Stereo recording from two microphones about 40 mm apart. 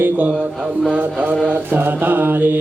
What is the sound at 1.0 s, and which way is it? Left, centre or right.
Mantra, right.